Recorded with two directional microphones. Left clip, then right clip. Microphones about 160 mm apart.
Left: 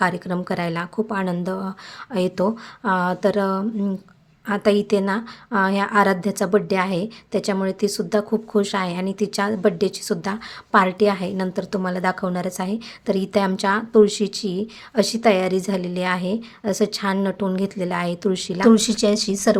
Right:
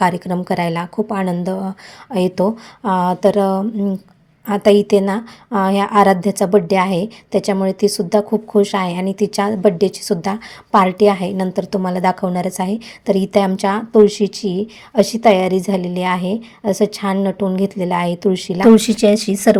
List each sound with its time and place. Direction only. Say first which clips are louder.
0.0 s a woman's voice: right 5 dB; 10° right (ahead or behind)
3.6 s speech: right 5 dB; centre (ahead or behind)
4.4 s a woman's voice: right 7 dB; 10° right (ahead or behind)